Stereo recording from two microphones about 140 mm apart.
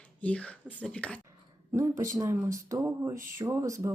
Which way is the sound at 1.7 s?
20° right (ahead or behind).